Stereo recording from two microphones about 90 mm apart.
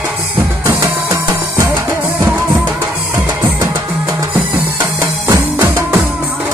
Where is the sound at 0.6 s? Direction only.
35° right (ahead or behind).